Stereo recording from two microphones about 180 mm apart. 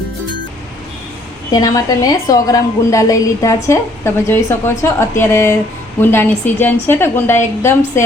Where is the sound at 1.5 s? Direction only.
20° left (ahead or behind).